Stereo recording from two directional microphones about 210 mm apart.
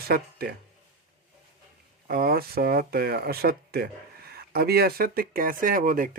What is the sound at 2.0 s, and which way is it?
Speech, 45° right (ahead or behind).